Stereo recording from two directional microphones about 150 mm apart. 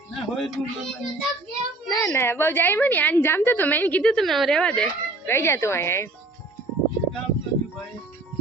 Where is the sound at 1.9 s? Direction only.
15° left (ahead or behind).